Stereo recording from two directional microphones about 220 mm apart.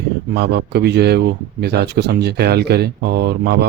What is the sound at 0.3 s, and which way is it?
Speech, 50° right (ahead or behind).